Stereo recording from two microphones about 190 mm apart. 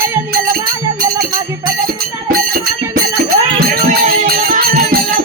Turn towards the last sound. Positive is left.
turn(degrees=-50)  # may be behind; listen again after turning